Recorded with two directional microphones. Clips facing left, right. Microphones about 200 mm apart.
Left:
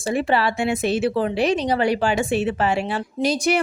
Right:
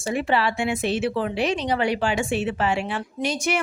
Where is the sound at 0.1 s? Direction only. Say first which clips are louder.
Left 2 dB; 35° left (ahead or behind).